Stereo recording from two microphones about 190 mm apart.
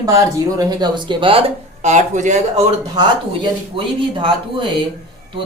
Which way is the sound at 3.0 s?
25° right (ahead or behind).